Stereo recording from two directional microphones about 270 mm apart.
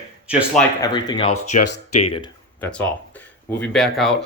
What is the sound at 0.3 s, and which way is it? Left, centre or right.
Speech, centre.